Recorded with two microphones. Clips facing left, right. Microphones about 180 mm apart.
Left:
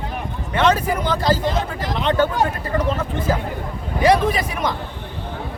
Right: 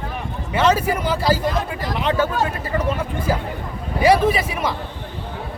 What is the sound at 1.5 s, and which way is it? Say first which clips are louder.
Speech: even; 25° left (ahead or behind).